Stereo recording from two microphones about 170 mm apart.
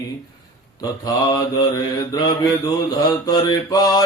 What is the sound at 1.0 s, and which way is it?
Mantra, 25° left (ahead or behind).